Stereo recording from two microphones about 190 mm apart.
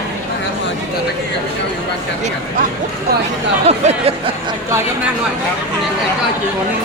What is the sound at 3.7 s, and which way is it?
Speech, 35° right (ahead or behind).